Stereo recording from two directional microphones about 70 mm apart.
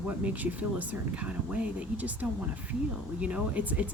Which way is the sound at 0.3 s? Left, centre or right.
Right.